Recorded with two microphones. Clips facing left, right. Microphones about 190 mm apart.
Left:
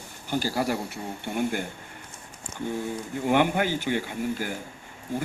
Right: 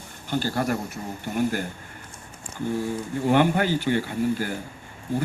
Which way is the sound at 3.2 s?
15° left (ahead or behind).